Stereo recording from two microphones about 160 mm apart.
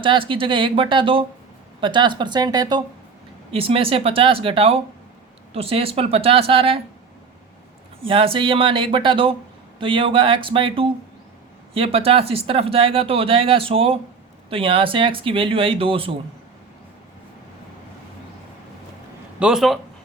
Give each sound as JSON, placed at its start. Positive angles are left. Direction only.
{"t": 0.0, "sound": "speech", "side_deg": -30}
{"t": 3.5, "sound": "speech", "side_deg": -35}
{"t": 8.0, "sound": "speech", "side_deg": -35}
{"t": 19.4, "sound": "a man's voice", "side_deg": -5}